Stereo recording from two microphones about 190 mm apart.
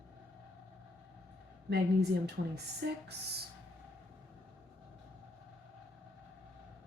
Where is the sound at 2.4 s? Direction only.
60° right (ahead or behind).